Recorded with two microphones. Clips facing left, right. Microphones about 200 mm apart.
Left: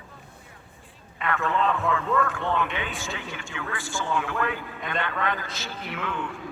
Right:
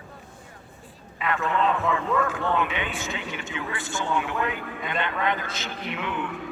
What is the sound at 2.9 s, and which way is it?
Speech, 20° right (ahead or behind).